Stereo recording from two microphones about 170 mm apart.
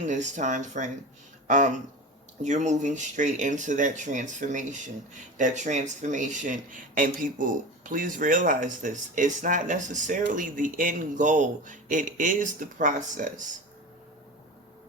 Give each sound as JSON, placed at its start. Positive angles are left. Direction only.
{"t": 0.0, "sound": "speech", "side_deg": -45}
{"t": 1.5, "sound": "a sound", "side_deg": -45}
{"t": 2.4, "sound": "speech", "side_deg": -45}